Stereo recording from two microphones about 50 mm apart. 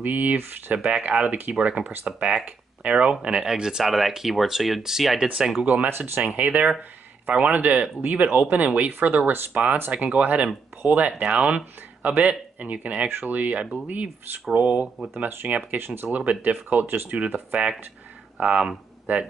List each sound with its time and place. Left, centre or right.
0.0 s speech: right
0.7 s speech: centre
1.6 s speech: right
5.9 s speech: right
6.3 s speech: right
15.8 s speech: right
16.1 s speech: right
16.8 s speech: right
17.2 s speech: right